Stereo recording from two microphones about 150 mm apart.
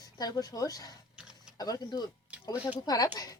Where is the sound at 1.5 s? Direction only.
25° left (ahead or behind).